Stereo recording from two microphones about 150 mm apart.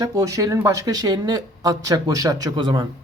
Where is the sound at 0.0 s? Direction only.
20° right (ahead or behind).